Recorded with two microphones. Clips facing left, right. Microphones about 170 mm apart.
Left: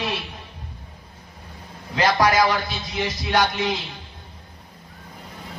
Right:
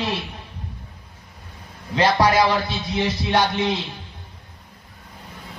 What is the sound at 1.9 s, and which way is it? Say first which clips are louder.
A man's voice: right 1 dB; 30° right (ahead or behind).